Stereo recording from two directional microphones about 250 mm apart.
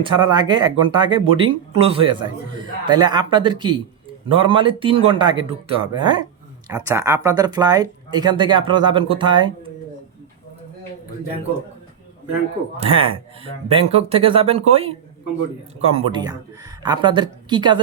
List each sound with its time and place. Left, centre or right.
0.0 s speech: centre
12.7 s speech: right